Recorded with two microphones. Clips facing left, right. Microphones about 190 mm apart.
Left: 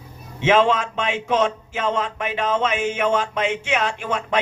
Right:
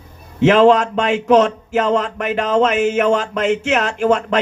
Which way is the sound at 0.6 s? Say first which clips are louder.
Right 7 dB; 40° right (ahead or behind).